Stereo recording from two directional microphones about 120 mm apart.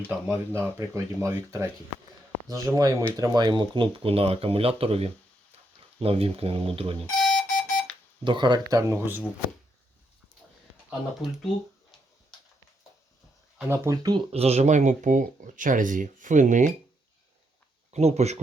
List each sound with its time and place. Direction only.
0.1 s speech: 15° right (ahead or behind); by 7.0 s 50° right (ahead or behind)
7.1 s alarm clock: centre (ahead or behind)
8.2 s speech: 40° right (ahead or behind)
8.7 s speech: 20° right (ahead or behind)
13.7 s speech: 25° right (ahead or behind)
14.3 s speech: 60° right (ahead or behind); by 16.7 s 90° right
17.9 s speech: 65° right (ahead or behind)